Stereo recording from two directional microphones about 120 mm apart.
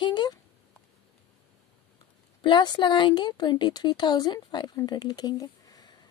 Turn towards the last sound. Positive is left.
turn(degrees=30)  # may be behind; listen again after turning